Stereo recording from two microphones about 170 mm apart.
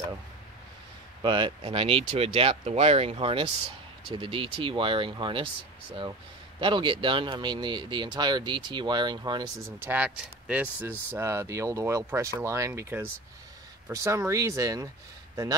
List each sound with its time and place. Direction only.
1.2 s speech: 30° right (ahead or behind)
9.8 s speech: 10° right (ahead or behind)